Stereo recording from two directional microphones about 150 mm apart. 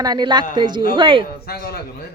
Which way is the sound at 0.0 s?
25° right (ahead or behind).